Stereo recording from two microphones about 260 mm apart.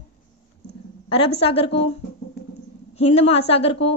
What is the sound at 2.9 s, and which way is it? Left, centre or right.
Speech, left.